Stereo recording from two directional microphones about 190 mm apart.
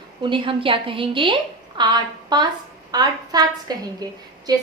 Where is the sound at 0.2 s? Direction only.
25° right (ahead or behind).